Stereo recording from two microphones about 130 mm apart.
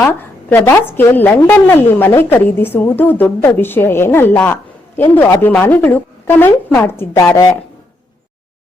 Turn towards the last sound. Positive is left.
turn(degrees=25)  # may be behind; listen again after turning